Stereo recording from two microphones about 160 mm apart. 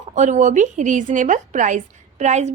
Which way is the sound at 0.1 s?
50° right (ahead or behind).